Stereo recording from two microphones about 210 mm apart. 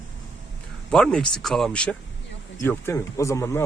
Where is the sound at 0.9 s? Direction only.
5° left (ahead or behind).